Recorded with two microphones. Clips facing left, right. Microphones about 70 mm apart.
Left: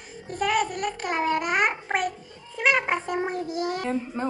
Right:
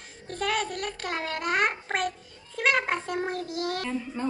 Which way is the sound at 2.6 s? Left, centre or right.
Centre.